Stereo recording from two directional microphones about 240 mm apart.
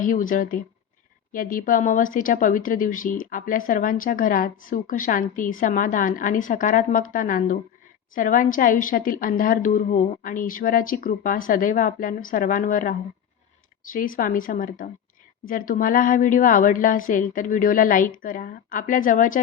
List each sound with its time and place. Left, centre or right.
0.0 s speech: left